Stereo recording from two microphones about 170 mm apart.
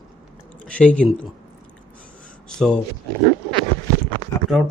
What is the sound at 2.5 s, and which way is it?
Speech, 5° left (ahead or behind).